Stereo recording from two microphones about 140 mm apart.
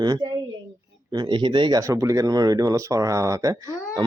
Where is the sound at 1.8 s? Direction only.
20° right (ahead or behind).